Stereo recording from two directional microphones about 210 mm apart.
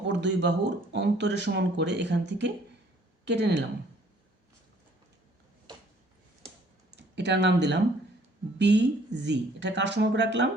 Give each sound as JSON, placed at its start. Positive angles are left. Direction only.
{"t": 0.0, "sound": "speech", "side_deg": -55}
{"t": 5.7, "sound": "a sound", "side_deg": -20}
{"t": 6.9, "sound": "speech", "side_deg": -55}